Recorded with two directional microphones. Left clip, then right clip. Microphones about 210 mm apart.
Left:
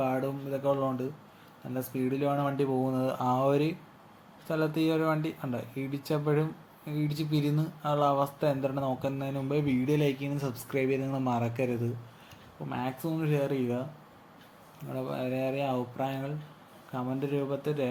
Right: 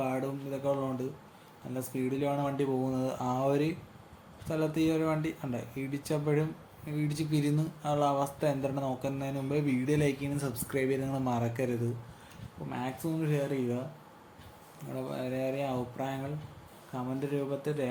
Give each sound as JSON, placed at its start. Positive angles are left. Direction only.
{"t": 0.0, "sound": "a sound", "side_deg": 10}
{"t": 1.7, "sound": "speech", "side_deg": 10}
{"t": 14.9, "sound": "speech", "side_deg": 10}